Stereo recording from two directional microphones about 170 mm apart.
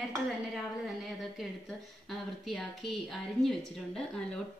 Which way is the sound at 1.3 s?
Centre (ahead or behind).